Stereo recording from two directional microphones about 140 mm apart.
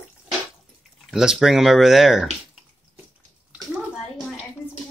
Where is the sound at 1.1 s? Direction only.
5° right (ahead or behind).